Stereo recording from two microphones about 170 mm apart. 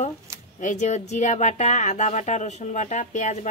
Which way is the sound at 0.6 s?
45° left (ahead or behind).